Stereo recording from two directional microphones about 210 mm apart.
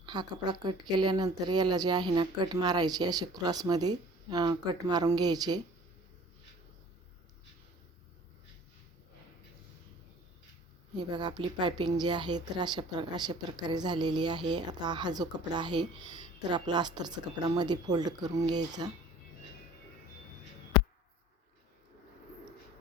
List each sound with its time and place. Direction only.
0.0 s a woman's voice: 20° right (ahead or behind)
10.9 s a woman's voice: 20° right (ahead or behind)